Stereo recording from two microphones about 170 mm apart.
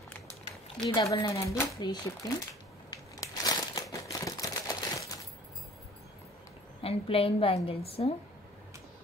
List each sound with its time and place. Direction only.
0.8 s speech: 20° left (ahead or behind)
2.9 s crumpling: 20° left (ahead or behind)
6.8 s a woman's voice: 35° left (ahead or behind)